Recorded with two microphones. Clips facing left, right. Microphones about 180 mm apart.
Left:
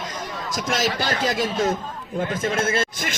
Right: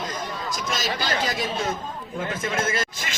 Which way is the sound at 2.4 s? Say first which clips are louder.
Left 3 dB; 30° left (ahead or behind).